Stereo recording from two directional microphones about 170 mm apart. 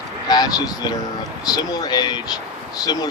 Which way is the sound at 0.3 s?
25° left (ahead or behind).